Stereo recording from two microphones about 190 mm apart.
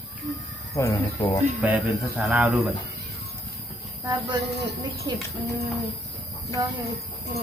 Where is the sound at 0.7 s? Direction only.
15° left (ahead or behind).